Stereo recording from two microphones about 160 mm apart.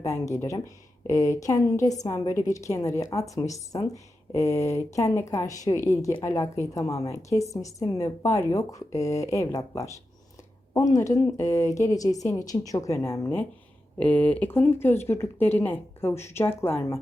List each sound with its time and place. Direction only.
0.0 s a woman's voice: 20° left (ahead or behind)